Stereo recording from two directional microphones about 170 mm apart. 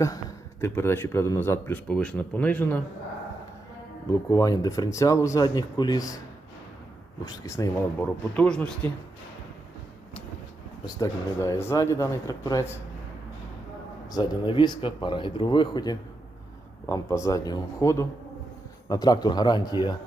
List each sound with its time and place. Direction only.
0.6 s speech: 15° left (ahead or behind)
4.1 s speech: 20° left (ahead or behind)
7.3 s speech: 20° left (ahead or behind)
10.8 s speech: 20° left (ahead or behind)
14.1 s speech: 25° left (ahead or behind)